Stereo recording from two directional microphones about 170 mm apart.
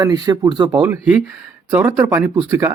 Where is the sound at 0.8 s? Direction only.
10° right (ahead or behind).